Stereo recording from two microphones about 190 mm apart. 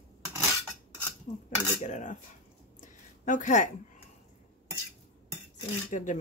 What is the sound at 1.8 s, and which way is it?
Speech, 40° left (ahead or behind).